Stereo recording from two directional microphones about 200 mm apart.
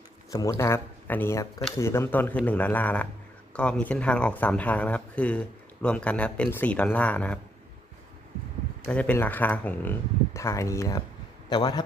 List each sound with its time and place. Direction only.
0.3 s speech: 15° left (ahead or behind)
8.9 s a man's voice: 5° left (ahead or behind)